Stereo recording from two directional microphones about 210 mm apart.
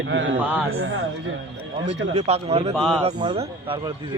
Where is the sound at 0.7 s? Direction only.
70° right (ahead or behind).